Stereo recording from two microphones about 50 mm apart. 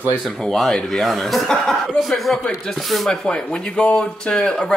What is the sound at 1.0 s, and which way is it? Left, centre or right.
Speech, centre.